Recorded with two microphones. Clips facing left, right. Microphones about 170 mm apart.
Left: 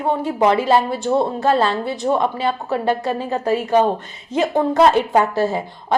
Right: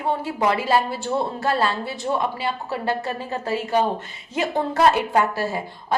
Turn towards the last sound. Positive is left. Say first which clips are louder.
# left 4 dB
turn(degrees=20)  # may be behind; listen again after turning